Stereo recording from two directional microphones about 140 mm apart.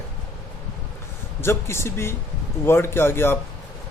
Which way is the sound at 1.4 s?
20° left (ahead or behind).